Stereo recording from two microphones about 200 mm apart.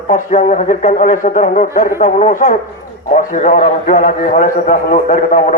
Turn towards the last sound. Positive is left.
turn(degrees=40)  # may be behind; listen again after turning